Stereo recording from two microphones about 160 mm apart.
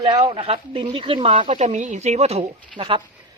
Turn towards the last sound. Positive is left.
turn(degrees=-35)  # may be behind; listen again after turning